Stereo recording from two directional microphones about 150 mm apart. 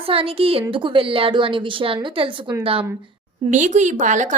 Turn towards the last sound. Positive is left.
turn(degrees=-55)  # may be behind; listen again after turning